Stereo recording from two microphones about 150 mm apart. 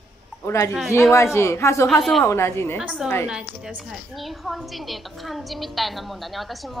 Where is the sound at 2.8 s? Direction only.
10° right (ahead or behind).